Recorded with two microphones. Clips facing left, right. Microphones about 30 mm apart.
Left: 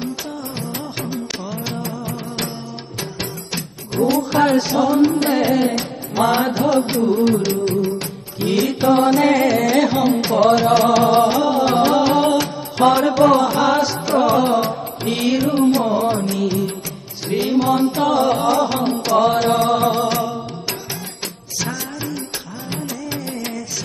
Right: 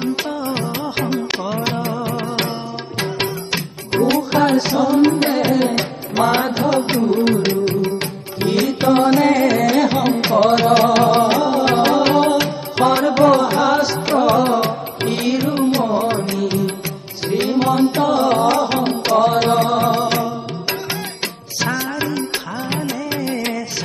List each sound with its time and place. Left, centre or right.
0.0 s music: right
8.4 s music: right
10.7 s music: right
13.8 s music: right
17.4 s music: right
21.2 s music: right
21.9 s music: right